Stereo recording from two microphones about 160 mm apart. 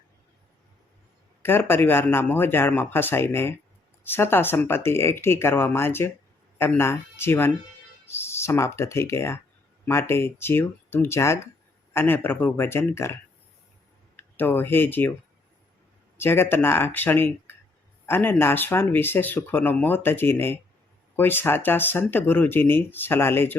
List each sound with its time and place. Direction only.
1.4 s speech: 15° left (ahead or behind)
14.2 s speech: 10° left (ahead or behind)
16.1 s speech: 15° left (ahead or behind)